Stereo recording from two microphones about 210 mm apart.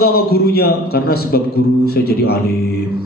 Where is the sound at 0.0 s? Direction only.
50° left (ahead or behind).